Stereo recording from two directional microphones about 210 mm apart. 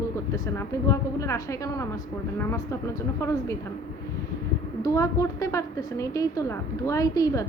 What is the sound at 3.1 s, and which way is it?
Speech, 15° left (ahead or behind).